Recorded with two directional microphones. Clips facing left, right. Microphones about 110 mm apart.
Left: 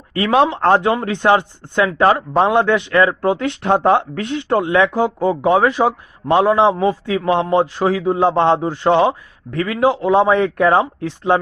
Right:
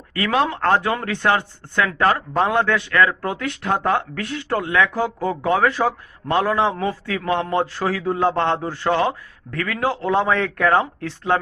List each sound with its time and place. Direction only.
0.1 s speech: 25° left (ahead or behind)